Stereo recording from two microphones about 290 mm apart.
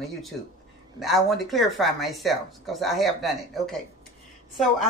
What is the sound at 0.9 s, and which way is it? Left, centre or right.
Speech, centre.